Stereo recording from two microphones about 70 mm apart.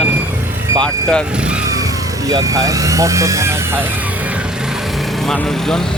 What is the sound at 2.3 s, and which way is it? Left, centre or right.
Speech, right.